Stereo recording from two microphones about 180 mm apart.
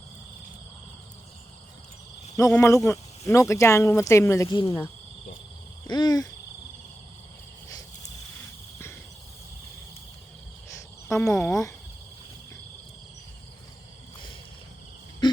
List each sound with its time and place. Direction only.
2.5 s speech: 15° left (ahead or behind)
5.9 s a sound: 20° left (ahead or behind)
11.1 s speech: 15° left (ahead or behind)
15.2 s wheeze: 25° left (ahead or behind)